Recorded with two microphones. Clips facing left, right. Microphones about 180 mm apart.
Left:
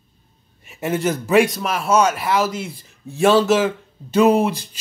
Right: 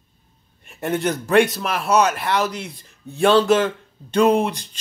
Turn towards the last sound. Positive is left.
turn(degrees=0)  # may be behind; listen again after turning